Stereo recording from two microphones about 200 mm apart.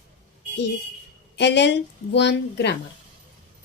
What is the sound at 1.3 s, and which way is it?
A woman's voice, 60° left (ahead or behind).